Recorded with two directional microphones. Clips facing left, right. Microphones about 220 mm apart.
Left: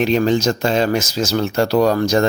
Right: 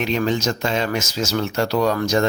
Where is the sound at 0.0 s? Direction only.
35° left (ahead or behind).